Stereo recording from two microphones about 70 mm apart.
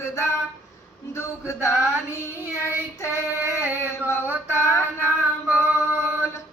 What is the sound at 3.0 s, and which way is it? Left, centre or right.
Female singing, left.